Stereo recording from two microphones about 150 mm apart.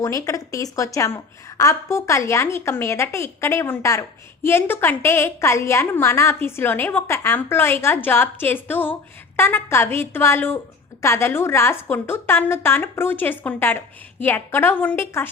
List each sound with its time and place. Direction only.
0.0 s a woman's voice: 20° left (ahead or behind)